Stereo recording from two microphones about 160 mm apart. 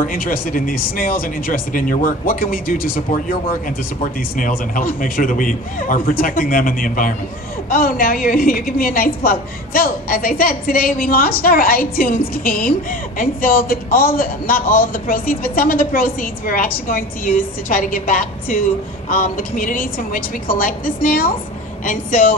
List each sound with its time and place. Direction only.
0.0 s speech: 60° left (ahead or behind)